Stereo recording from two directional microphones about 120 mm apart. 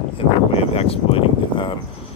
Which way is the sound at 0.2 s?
55° left (ahead or behind).